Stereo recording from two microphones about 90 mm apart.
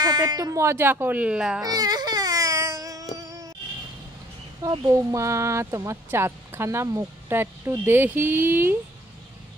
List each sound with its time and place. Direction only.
0.0 s speech: 50° right (ahead or behind); by 1.6 s 10° right (ahead or behind)
1.6 s music: 45° right (ahead or behind)
4.6 s speech: 40° right (ahead or behind); by 8.7 s 25° right (ahead or behind)